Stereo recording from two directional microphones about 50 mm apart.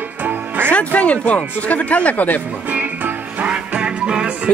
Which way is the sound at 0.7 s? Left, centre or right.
Left.